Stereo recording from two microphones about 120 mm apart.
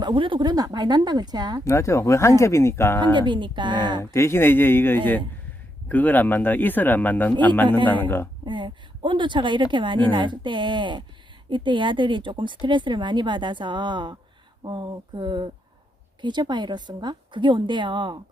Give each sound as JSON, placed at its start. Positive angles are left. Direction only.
{"t": 0.0, "sound": "a woman's voice", "side_deg": -45}
{"t": 1.6, "sound": "speech", "side_deg": 25}
{"t": 3.2, "sound": "a woman's voice", "side_deg": -40}
{"t": 4.0, "sound": "speech", "side_deg": 25}
{"t": 8.4, "sound": "a woman's voice", "side_deg": -40}